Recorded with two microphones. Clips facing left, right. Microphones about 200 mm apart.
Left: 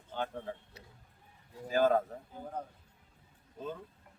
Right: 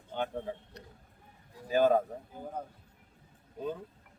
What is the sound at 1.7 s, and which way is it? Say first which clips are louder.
Speech: right 2 dB; 15° right (ahead or behind).